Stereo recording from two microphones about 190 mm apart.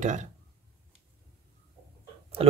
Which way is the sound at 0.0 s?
40° right (ahead or behind).